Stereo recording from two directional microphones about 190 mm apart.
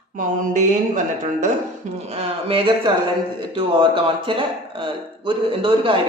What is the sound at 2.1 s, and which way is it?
A man's voice, 30° right (ahead or behind).